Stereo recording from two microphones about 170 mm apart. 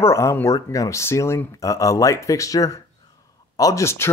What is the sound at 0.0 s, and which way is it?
Speech, 15° left (ahead or behind).